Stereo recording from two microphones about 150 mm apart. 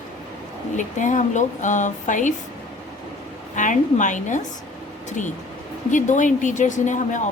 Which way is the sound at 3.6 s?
55° left (ahead or behind).